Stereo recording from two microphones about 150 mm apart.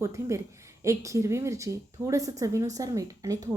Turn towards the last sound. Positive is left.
turn(degrees=-25)  # may be behind; listen again after turning